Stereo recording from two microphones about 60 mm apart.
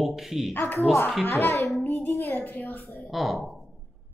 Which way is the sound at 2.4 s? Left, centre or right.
Left.